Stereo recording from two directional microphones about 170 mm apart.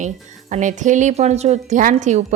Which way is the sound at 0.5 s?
45° right (ahead or behind).